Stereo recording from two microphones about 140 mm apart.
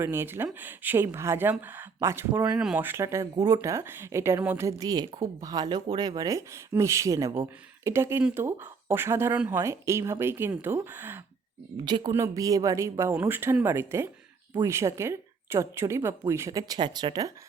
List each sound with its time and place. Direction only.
0.0 s speech: 15° right (ahead or behind)
11.9 s speech: 30° right (ahead or behind)